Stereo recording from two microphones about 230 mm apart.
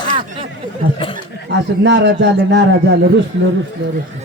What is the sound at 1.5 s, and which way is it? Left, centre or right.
Speech, right.